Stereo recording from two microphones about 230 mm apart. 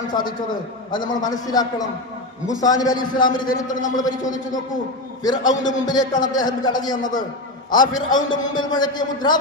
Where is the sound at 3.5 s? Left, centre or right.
Left.